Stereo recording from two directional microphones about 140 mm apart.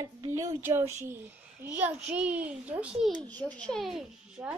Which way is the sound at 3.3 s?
10° left (ahead or behind).